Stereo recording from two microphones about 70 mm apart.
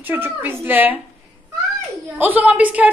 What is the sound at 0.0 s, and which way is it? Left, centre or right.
Speech, right.